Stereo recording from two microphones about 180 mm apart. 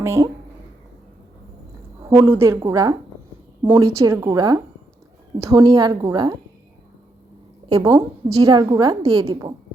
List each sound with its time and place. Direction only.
0.0 s speech: 15° right (ahead or behind)
2.0 s a woman's voice: 15° right (ahead or behind)
7.7 s a woman's voice: 15° right (ahead or behind)